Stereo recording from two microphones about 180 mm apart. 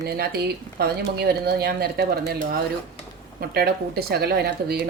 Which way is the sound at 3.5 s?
60° right (ahead or behind).